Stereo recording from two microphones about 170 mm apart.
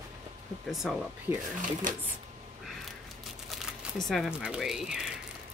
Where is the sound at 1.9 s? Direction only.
50° right (ahead or behind).